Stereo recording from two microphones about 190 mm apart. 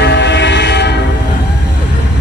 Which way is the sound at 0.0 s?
65° left (ahead or behind).